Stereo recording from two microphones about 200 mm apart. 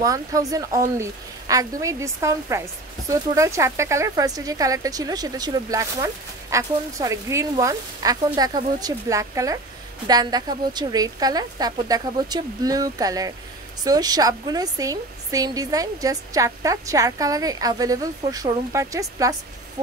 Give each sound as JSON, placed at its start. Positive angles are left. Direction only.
{"t": 0.0, "sound": "a woman's voice", "side_deg": -15}